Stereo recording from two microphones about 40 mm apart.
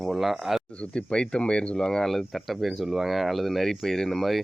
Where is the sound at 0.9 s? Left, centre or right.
Left.